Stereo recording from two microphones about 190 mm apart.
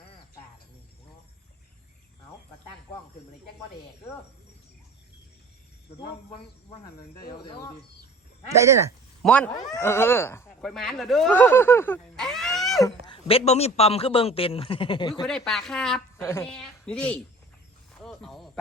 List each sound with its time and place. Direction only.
8.4 s speech: 15° right (ahead or behind)
9.2 s speech: 5° left (ahead or behind)
10.6 s speech: centre (ahead or behind)
12.8 s a man's voice: 25° left (ahead or behind)
15.3 s speech: centre (ahead or behind)
18.0 s a sound: centre (ahead or behind)